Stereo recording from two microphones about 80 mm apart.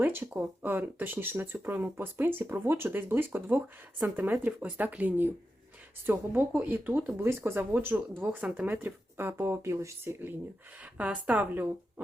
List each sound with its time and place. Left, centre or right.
0.0 s speech: right
10.9 s speech: centre